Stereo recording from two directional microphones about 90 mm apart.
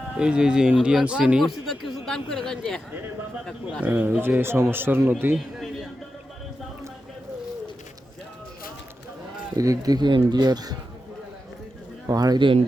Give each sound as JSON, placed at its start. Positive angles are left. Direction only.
{"t": 0.1, "sound": "speech", "side_deg": -10}
{"t": 3.8, "sound": "speech", "side_deg": -20}
{"t": 5.5, "sound": "music", "side_deg": -5}
{"t": 9.6, "sound": "speech", "side_deg": -40}
{"t": 12.0, "sound": "speech", "side_deg": -45}